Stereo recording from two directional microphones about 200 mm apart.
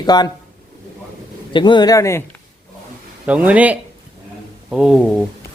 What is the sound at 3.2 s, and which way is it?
Speech, 5° right (ahead or behind).